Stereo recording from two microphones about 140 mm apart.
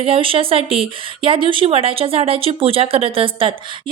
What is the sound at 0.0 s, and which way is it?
A woman's voice, 40° right (ahead or behind).